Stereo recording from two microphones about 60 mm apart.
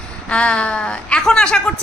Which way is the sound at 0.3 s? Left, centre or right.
Centre.